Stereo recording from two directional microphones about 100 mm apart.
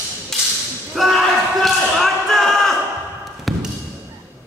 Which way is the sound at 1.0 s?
Centre (ahead or behind).